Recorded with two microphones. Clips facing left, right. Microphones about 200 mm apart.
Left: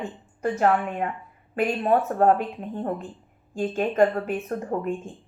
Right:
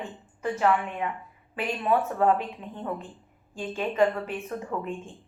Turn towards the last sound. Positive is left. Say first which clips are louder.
# left 5 dB
turn(degrees=45)  # may be behind; listen again after turning